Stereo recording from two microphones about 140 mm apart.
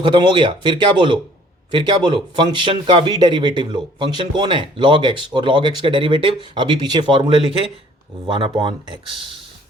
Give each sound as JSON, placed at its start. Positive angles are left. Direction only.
{"t": 0.0, "sound": "speech", "side_deg": -35}
{"t": 8.4, "sound": "speech", "side_deg": -35}